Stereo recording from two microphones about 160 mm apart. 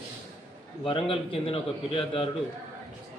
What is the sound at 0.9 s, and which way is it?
A man's voice, 35° left (ahead or behind).